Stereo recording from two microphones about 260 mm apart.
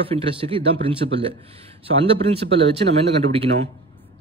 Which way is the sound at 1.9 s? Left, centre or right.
Right.